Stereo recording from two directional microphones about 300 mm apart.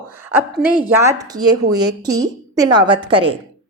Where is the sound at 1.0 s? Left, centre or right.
Centre.